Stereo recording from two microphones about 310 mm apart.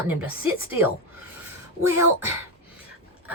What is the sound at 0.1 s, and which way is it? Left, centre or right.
Speech, centre.